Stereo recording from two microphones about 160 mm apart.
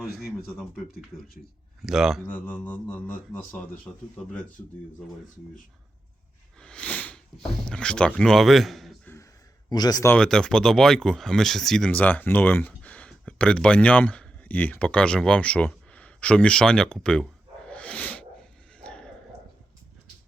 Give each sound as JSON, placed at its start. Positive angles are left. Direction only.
{"t": 0.0, "sound": "speech", "side_deg": 0}
{"t": 1.8, "sound": "speech", "side_deg": 0}
{"t": 2.2, "sound": "speech", "side_deg": 10}
{"t": 6.6, "sound": "speech", "side_deg": 5}
{"t": 9.6, "sound": "speech", "side_deg": 25}
{"t": 10.1, "sound": "speech", "side_deg": 5}
{"t": 17.7, "sound": "a sound", "side_deg": 5}